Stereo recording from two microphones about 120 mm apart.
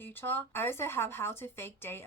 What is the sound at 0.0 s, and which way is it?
A woman's voice, 15° left (ahead or behind).